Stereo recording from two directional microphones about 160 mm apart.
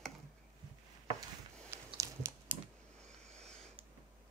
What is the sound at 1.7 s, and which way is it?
Biting, 15° right (ahead or behind).